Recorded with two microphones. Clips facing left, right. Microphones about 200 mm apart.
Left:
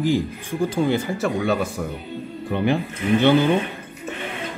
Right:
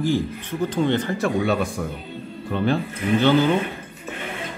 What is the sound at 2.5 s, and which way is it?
A man's voice, 15° left (ahead or behind).